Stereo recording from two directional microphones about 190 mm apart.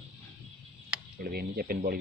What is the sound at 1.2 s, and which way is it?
Speech, 50° right (ahead or behind).